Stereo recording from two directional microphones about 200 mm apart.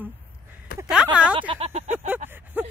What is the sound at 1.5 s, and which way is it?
Speech, 30° right (ahead or behind).